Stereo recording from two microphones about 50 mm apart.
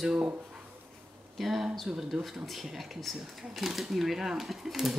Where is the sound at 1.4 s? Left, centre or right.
Centre.